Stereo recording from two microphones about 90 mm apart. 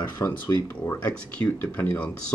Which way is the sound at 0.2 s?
35° left (ahead or behind).